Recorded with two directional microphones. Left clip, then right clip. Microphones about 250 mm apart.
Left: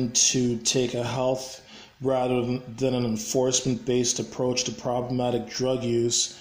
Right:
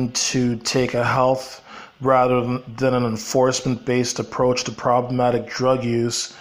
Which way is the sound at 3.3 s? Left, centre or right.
Right.